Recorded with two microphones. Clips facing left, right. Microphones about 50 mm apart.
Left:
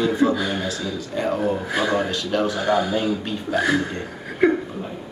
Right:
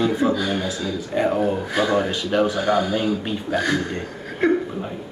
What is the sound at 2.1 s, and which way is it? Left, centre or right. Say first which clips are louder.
Speech: right 2 dB; centre.